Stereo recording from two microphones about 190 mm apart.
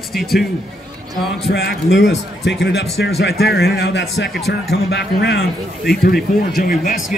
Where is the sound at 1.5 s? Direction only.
65° left (ahead or behind).